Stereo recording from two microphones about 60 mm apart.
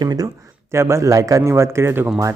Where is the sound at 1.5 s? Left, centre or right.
Right.